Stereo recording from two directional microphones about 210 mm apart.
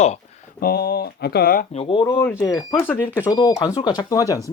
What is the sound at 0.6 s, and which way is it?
Speech, 45° left (ahead or behind).